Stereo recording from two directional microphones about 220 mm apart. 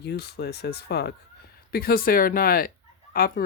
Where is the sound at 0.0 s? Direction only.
45° left (ahead or behind).